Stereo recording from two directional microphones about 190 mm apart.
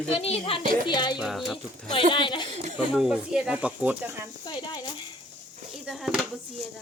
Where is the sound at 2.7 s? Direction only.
Centre (ahead or behind).